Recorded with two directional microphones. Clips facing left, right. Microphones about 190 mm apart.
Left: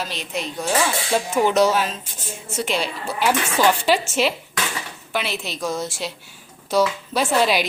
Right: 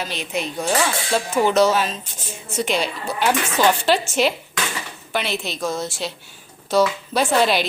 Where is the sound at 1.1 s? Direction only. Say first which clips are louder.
Right 1 dB; 15° left (ahead or behind).